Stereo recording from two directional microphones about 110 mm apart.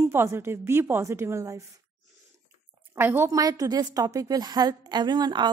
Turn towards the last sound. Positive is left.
turn(degrees=-40)  # may be behind; listen again after turning